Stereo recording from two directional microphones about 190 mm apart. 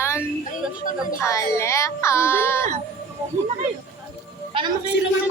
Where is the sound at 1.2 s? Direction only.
15° left (ahead or behind).